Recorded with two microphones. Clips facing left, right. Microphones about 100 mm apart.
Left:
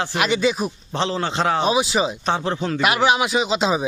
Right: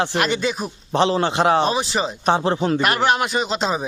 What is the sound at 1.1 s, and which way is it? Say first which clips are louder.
Speech: right 2 dB; 20° right (ahead or behind).